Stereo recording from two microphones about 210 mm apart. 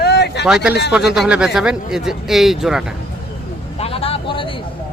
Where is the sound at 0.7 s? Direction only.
50° left (ahead or behind).